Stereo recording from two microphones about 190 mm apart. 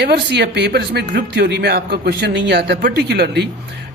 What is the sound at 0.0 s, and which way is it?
A man's voice, 60° right (ahead or behind).